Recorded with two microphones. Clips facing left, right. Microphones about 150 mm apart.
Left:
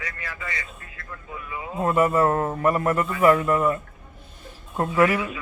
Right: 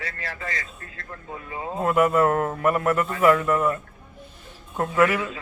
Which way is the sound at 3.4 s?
10° left (ahead or behind).